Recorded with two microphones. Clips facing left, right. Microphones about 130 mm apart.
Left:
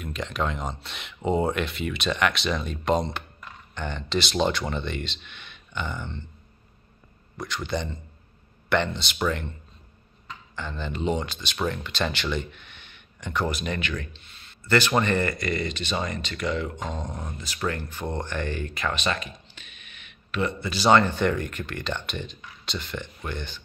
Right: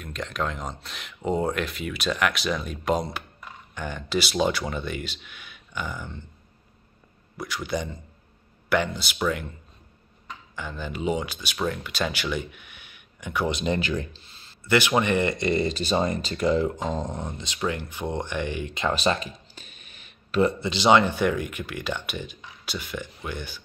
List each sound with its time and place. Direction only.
0.0 s speech: centre (ahead or behind)
7.3 s speech: 5° right (ahead or behind)
10.5 s speech: 10° right (ahead or behind)
13.5 s speech: 25° right (ahead or behind)
14.6 s speech: 10° right (ahead or behind)
15.3 s speech: 30° right (ahead or behind)
17.6 s speech: 15° right (ahead or behind)
18.9 s a sound: 30° right (ahead or behind)
20.7 s speech: 15° right (ahead or behind)